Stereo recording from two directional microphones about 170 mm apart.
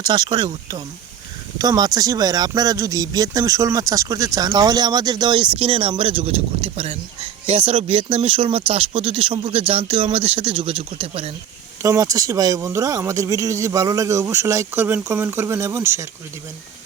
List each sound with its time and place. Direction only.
0.0 s speech: 25° right (ahead or behind)
11.8 s speech: 20° right (ahead or behind)